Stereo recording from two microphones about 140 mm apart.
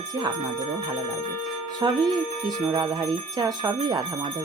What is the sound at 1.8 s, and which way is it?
Speech, 30° right (ahead or behind).